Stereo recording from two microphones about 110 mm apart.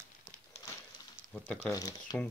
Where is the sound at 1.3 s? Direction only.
5° left (ahead or behind).